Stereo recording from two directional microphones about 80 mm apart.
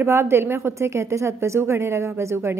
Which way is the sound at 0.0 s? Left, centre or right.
Right.